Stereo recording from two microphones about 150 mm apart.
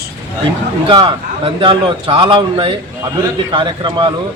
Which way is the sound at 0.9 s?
35° right (ahead or behind).